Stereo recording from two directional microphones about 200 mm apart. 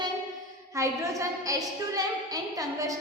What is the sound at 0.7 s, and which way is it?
Speech, 15° right (ahead or behind).